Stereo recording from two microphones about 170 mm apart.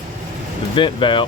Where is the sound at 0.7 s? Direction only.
30° left (ahead or behind).